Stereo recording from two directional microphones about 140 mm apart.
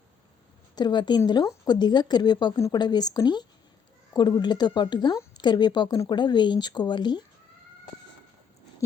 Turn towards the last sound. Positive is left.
turn(degrees=30)  # may be behind; listen again after turning